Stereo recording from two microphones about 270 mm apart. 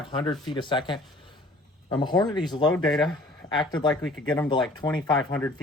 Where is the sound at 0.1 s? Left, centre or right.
Centre.